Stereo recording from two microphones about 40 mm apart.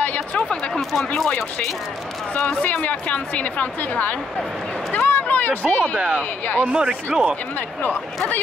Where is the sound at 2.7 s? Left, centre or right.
Left.